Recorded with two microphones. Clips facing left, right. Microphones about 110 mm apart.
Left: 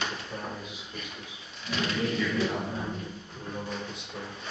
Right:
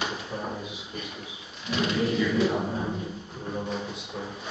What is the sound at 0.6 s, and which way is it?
A man's voice, 5° right (ahead or behind).